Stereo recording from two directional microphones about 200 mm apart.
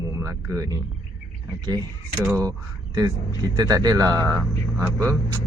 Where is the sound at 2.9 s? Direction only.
20° right (ahead or behind).